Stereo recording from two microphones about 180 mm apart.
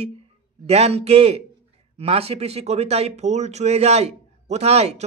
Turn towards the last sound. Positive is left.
turn(degrees=-35)  # may be behind; listen again after turning